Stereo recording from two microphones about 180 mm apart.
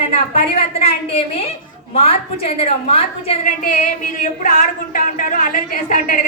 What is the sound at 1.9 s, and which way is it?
A woman's voice, 35° left (ahead or behind).